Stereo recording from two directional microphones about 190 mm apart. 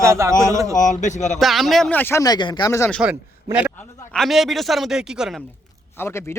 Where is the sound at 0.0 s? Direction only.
15° right (ahead or behind).